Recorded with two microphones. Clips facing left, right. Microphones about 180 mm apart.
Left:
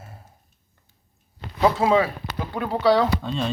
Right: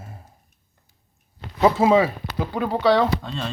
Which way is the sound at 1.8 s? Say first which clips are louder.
Right 3 dB; 5° right (ahead or behind).